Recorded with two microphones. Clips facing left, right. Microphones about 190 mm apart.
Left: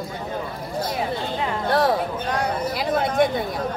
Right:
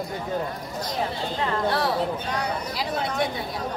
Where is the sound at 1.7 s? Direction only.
50° left (ahead or behind).